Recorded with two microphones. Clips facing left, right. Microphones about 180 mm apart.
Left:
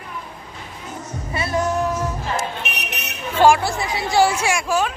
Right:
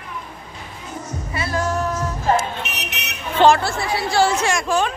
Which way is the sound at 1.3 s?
25° left (ahead or behind).